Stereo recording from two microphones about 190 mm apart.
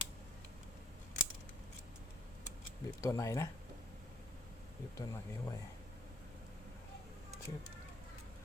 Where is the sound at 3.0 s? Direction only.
15° left (ahead or behind).